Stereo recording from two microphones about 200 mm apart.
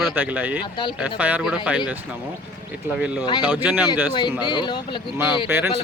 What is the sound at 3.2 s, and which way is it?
Speech, 20° left (ahead or behind).